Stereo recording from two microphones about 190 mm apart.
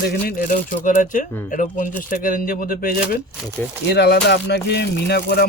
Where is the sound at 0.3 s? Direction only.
45° left (ahead or behind).